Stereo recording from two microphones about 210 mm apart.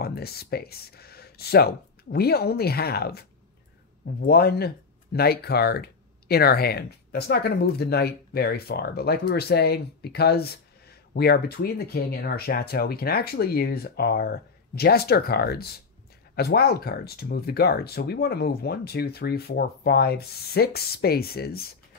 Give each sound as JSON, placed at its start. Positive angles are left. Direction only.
{"t": 0.0, "sound": "speech", "side_deg": 50}